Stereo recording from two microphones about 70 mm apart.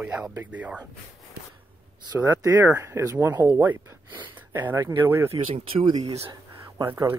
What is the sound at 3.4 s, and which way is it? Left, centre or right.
Speech, right.